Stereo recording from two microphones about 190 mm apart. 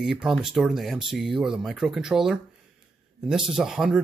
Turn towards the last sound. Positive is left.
turn(degrees=0)  # may be behind; listen again after turning